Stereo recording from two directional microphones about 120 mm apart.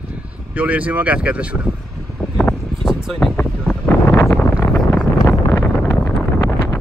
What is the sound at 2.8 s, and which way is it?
Speech, centre (ahead or behind).